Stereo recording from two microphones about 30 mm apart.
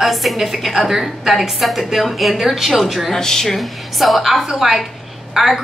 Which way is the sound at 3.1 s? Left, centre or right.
Centre.